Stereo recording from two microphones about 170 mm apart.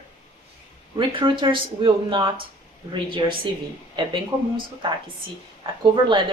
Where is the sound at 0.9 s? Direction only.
30° right (ahead or behind).